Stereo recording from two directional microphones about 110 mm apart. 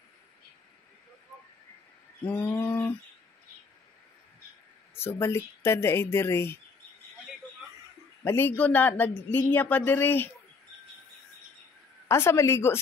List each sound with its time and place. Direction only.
2.2 s bird: 15° left (ahead or behind)
4.9 s speech: 20° left (ahead or behind)
8.2 s speech: 20° left (ahead or behind)
12.1 s speech: 25° left (ahead or behind)